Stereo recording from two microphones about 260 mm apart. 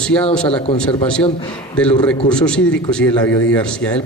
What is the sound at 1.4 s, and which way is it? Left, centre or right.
Speech, centre.